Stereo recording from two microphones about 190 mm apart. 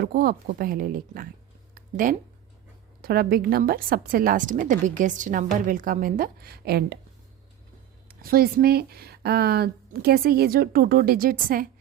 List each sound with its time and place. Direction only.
0.0 s speech: 55° right (ahead or behind)
1.7 s a sound: 45° right (ahead or behind)
3.0 s speech: 55° right (ahead or behind)
8.0 s speech: 50° right (ahead or behind)